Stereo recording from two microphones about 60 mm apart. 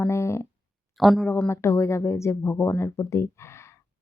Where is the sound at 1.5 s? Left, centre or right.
Left.